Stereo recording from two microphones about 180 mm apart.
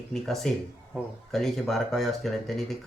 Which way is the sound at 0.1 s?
Centre (ahead or behind).